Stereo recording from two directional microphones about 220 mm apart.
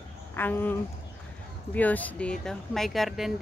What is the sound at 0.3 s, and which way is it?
A woman's voice, 10° left (ahead or behind).